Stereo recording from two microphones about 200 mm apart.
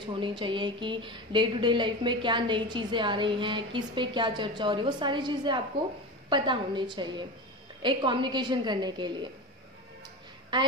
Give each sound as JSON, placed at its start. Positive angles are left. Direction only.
{"t": 0.0, "sound": "speech", "side_deg": -25}